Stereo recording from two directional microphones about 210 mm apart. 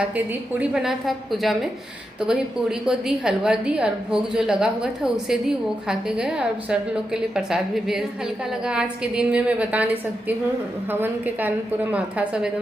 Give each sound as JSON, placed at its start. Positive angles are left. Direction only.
{"t": 0.6, "sound": "a woman's voice", "side_deg": -5}